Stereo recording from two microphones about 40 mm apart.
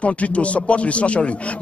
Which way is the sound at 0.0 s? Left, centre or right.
Left.